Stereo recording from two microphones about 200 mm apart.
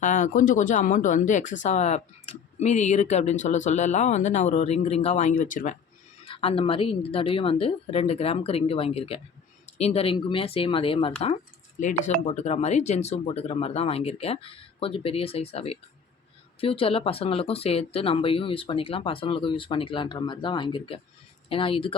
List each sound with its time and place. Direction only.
0.0 s speech: 40° left (ahead or behind)
6.2 s speech: 30° left (ahead or behind)